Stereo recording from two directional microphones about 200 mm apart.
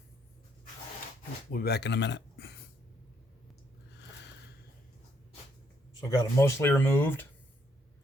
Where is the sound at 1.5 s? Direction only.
55° left (ahead or behind).